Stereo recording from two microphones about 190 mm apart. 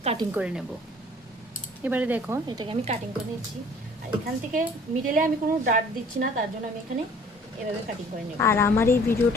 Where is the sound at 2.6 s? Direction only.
25° right (ahead or behind).